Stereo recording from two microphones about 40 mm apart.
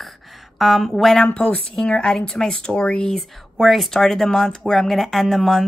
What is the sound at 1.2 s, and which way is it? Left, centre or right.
Speech, left.